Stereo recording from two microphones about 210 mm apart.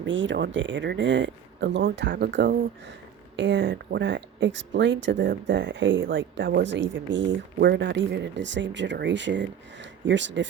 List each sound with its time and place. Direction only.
0.0 s speech: 60° right (ahead or behind)